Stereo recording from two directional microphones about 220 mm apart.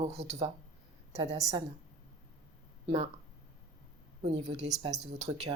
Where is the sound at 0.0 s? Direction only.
30° right (ahead or behind).